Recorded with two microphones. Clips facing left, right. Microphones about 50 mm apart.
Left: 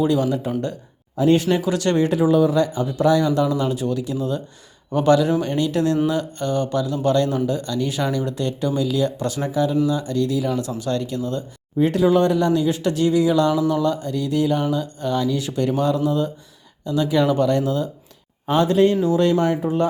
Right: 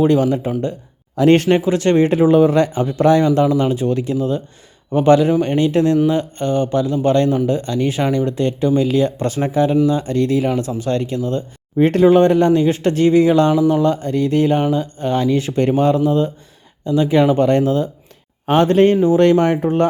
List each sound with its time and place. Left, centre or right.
0.0 s speech: right
1.1 s speech: right
1.5 s speech: right
11.8 s speech: right